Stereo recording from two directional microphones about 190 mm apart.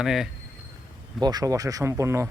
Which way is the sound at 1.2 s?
20° right (ahead or behind).